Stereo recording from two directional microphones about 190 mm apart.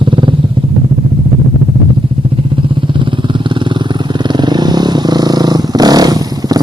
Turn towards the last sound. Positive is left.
turn(degrees=-20)  # may be behind; listen again after turning